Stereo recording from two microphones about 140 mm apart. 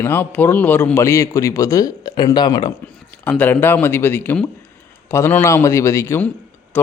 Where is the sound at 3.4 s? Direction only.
15° left (ahead or behind).